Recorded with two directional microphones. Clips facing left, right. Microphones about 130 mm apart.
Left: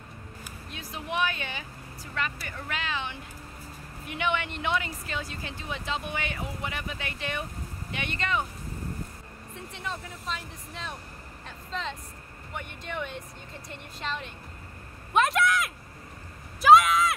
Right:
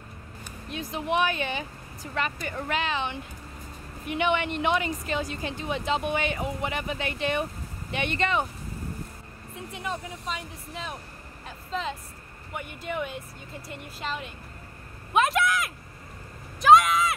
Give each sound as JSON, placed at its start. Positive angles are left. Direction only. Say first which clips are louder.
{"t": 0.7, "sound": "speech", "louder": "right 5 dB", "side_deg": -20}
{"t": 9.7, "sound": "speech", "louder": "right 4 dB", "side_deg": -10}
{"t": 16.6, "sound": "a sound", "louder": "even", "side_deg": 0}